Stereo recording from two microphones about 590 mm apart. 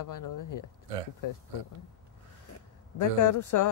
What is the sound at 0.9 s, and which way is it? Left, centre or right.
Speech, right.